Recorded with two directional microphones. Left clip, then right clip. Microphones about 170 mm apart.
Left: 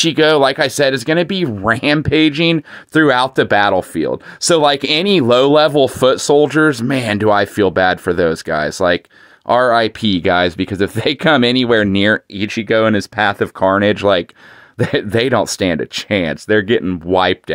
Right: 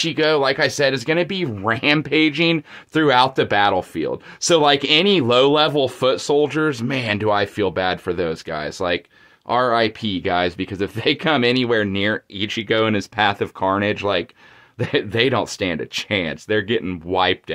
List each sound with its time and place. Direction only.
0.0 s speech: 50° left (ahead or behind)